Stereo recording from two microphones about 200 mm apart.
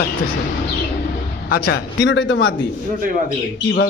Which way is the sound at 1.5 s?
60° left (ahead or behind).